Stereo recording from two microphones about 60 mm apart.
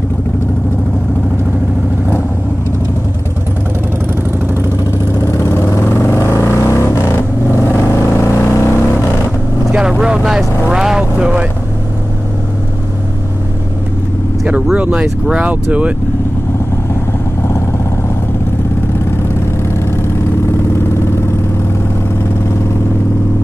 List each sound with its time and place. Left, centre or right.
5.3 s vehicle: left
9.8 s vehicle: centre
14.4 s vehicle: centre